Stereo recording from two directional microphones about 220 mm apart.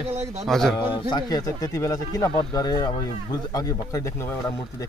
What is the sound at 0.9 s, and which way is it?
Speech, 20° left (ahead or behind).